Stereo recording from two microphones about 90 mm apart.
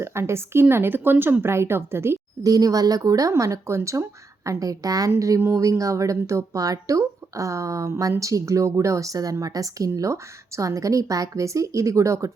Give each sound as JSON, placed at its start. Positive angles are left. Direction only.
{"t": 0.0, "sound": "speech", "side_deg": -30}
{"t": 2.4, "sound": "speech", "side_deg": -45}